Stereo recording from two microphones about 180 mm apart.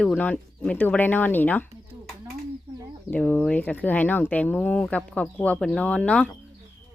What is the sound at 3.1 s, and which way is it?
Speech, 10° left (ahead or behind).